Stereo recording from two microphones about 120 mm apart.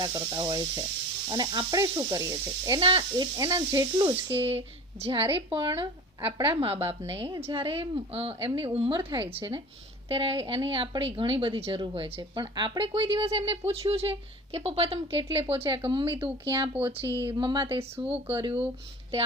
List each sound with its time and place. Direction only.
0.0 s speech: 30° right (ahead or behind)
2.8 s a woman's voice: 45° right (ahead or behind)
3.3 s speech: 30° right (ahead or behind)
4.4 s a woman's voice: 55° right (ahead or behind)
17.3 s a woman's voice: 40° right (ahead or behind)